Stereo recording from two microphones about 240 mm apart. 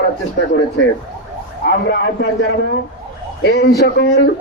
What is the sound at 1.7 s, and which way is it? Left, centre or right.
Speech, left.